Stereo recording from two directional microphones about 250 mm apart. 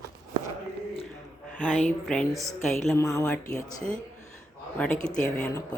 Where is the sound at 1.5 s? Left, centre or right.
Centre.